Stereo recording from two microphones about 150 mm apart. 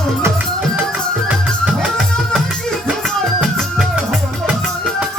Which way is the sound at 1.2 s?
5° right (ahead or behind).